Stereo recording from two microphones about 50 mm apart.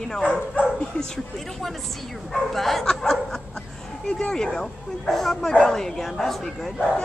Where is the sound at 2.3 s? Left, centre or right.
Centre.